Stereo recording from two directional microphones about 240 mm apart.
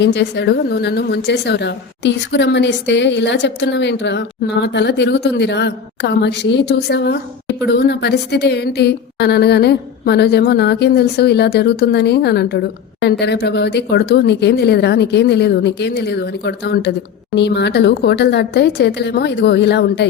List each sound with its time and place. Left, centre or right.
0.0 s a woman's voice: left